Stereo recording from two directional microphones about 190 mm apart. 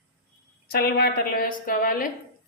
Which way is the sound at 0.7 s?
55° left (ahead or behind).